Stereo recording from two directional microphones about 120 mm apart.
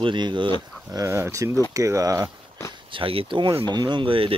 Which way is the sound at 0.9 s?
25° right (ahead or behind).